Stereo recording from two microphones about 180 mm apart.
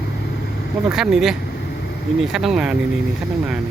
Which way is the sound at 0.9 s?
Centre (ahead or behind).